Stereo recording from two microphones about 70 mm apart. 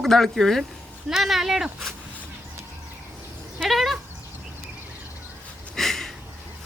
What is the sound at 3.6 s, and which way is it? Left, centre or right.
Speech, centre.